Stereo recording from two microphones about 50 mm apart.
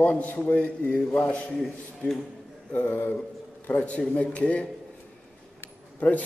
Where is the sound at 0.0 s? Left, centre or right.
Left.